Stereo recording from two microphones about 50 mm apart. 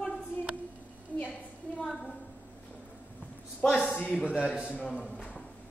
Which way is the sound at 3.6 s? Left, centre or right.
Left.